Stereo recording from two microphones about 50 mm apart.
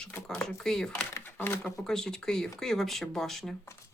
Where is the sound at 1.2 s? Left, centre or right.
Left.